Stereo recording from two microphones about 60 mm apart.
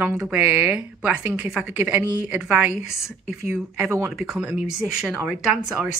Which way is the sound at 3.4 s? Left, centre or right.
Centre.